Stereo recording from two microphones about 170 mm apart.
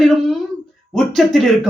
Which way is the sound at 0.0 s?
Centre (ahead or behind).